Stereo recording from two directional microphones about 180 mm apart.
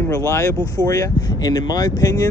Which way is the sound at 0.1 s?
15° left (ahead or behind).